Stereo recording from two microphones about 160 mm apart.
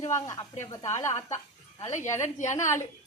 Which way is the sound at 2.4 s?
50° left (ahead or behind).